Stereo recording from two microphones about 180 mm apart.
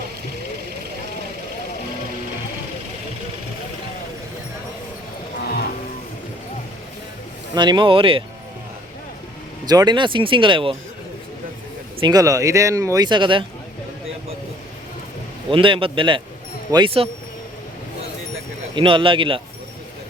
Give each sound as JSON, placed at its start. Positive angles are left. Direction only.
{"t": 7.5, "sound": "speech", "side_deg": -25}
{"t": 9.6, "sound": "speech", "side_deg": -25}
{"t": 12.0, "sound": "speech", "side_deg": -20}
{"t": 15.4, "sound": "speech", "side_deg": -30}
{"t": 18.7, "sound": "speech", "side_deg": -30}